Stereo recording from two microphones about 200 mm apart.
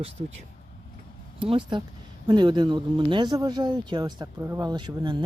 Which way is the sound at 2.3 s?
20° right (ahead or behind).